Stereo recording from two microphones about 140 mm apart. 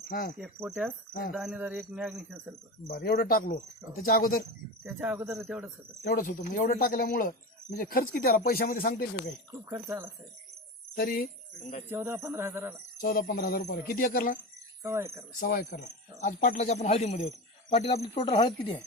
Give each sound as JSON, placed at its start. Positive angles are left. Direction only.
{"t": 0.0, "sound": "speech", "side_deg": 90}
{"t": 0.3, "sound": "a man's voice", "side_deg": -10}
{"t": 2.8, "sound": "speech", "side_deg": 90}
{"t": 4.9, "sound": "a man's voice", "side_deg": -15}
{"t": 6.1, "sound": "speech", "side_deg": 75}
{"t": 9.6, "sound": "speech", "side_deg": -20}
{"t": 10.9, "sound": "speech", "side_deg": 90}
{"t": 11.9, "sound": "a man's voice", "side_deg": -15}
{"t": 13.0, "sound": "speech", "side_deg": 90}
{"t": 14.8, "sound": "speech", "side_deg": -20}
{"t": 15.4, "sound": "speech", "side_deg": 85}
{"t": 16.2, "sound": "speech", "side_deg": 70}
{"t": 18.2, "sound": "speech", "side_deg": 35}